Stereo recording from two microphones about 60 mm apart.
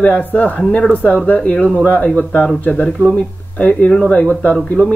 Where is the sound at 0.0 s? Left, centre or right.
Left.